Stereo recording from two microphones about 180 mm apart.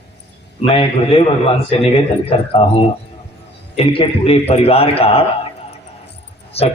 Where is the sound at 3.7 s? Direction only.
30° left (ahead or behind).